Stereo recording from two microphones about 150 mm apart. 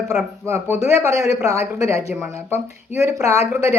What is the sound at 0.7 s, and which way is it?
Speech, 15° right (ahead or behind).